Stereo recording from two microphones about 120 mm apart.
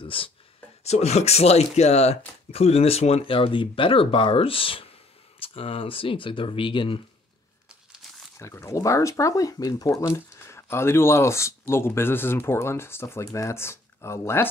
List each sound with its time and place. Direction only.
0.0 s speech: 50° left (ahead or behind)
0.8 s speech: 65° left (ahead or behind); by 7.0 s 45° left (ahead or behind)
8.0 s crumpling: centre (ahead or behind)
8.4 s speech: 25° left (ahead or behind)